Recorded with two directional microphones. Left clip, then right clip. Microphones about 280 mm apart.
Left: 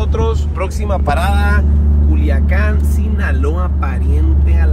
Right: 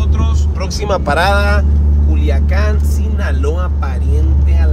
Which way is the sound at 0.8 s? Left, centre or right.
Right.